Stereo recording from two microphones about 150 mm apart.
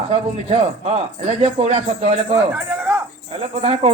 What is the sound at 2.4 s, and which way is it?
Speech, 10° right (ahead or behind).